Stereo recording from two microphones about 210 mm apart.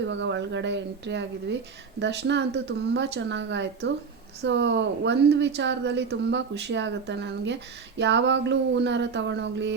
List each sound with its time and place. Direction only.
0.0 s a woman's voice: 60° right (ahead or behind)